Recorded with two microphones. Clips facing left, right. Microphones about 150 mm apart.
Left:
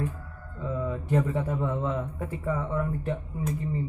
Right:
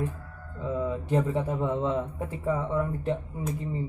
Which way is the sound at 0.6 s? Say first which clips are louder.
Right 2 dB; 20° right (ahead or behind).